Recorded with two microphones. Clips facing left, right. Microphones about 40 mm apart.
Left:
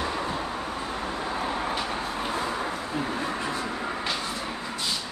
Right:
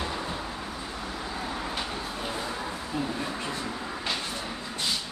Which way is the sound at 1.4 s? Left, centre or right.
Left.